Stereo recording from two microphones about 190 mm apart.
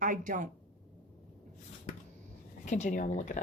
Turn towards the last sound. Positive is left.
turn(degrees=40)  # may be behind; listen again after turning